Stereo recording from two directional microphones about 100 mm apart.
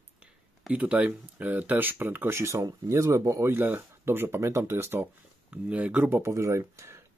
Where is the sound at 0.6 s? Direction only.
10° right (ahead or behind).